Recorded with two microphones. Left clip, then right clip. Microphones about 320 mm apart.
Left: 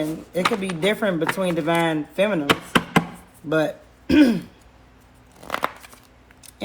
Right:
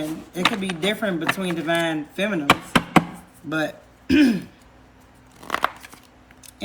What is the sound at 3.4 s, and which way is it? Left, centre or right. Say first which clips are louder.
Speech: left 4 dB; centre.